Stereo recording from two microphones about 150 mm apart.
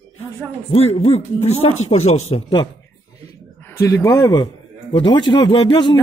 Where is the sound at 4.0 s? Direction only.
25° left (ahead or behind).